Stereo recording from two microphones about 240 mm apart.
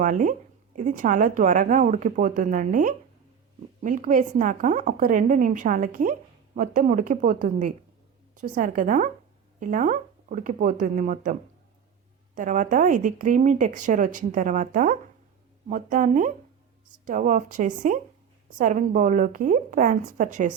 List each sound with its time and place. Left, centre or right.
0.0 s a woman's voice: right